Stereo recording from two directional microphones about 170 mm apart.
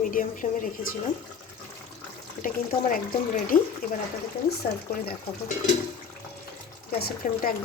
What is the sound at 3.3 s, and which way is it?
Speech, 50° left (ahead or behind).